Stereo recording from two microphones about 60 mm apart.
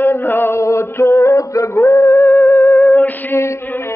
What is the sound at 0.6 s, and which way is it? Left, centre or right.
Music, left.